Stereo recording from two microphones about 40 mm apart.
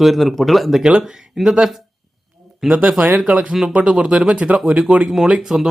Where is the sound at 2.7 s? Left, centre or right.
Right.